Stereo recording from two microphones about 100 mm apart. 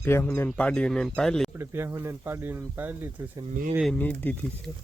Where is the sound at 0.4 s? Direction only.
10° left (ahead or behind).